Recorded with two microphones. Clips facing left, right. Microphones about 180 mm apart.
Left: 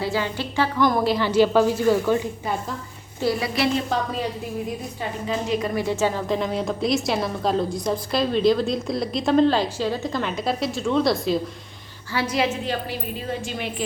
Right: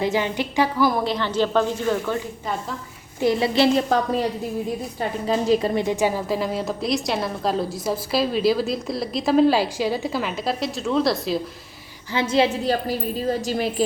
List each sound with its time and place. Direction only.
0.0 s a woman's voice: 20° right (ahead or behind); by 2.6 s 10° left (ahead or behind)
3.2 s a woman's voice: 25° right (ahead or behind)
4.9 s a woman's voice: 35° right (ahead or behind)
5.8 s a woman's voice: 15° right (ahead or behind)
12.1 s a woman's voice: 25° right (ahead or behind)
12.6 s a woman's voice: 40° right (ahead or behind)